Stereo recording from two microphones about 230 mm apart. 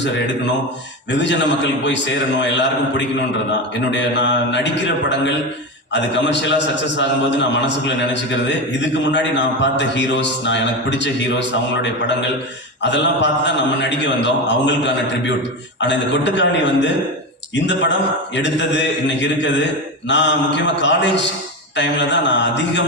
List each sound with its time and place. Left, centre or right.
1.1 s a man's voice: left
3.9 s a man's voice: left